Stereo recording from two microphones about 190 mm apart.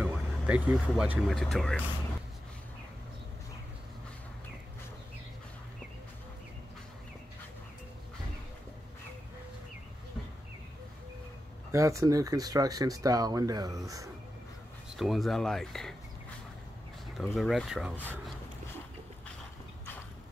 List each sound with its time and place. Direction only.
0.0 s speech: 10° right (ahead or behind)
11.7 s speech: 15° right (ahead or behind)
15.0 s speech: centre (ahead or behind)
17.2 s speech: centre (ahead or behind)